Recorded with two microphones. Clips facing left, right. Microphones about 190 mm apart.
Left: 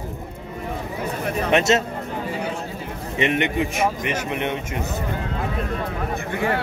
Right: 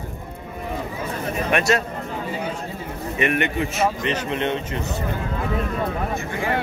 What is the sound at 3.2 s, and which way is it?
A man's voice, 20° left (ahead or behind).